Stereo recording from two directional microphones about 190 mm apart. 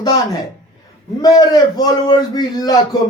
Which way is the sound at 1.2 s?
20° left (ahead or behind).